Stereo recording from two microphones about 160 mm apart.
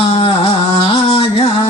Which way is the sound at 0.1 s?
35° left (ahead or behind).